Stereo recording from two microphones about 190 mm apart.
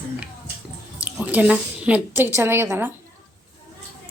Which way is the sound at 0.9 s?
5° right (ahead or behind).